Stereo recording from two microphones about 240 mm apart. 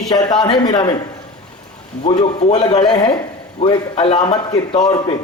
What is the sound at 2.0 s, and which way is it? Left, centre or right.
A man's voice, left.